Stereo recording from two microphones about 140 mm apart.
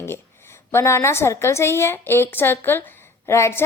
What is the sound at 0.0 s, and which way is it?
A woman's voice, 15° left (ahead or behind).